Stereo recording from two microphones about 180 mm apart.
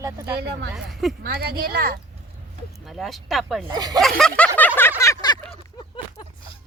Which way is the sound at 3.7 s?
20° right (ahead or behind).